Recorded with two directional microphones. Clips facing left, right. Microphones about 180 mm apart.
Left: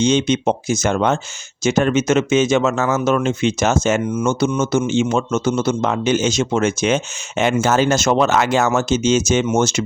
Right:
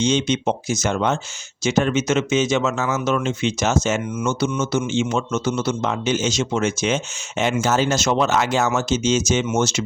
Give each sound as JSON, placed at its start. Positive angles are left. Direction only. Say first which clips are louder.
{"t": 0.0, "sound": "speech", "louder": "left 4 dB", "side_deg": 55}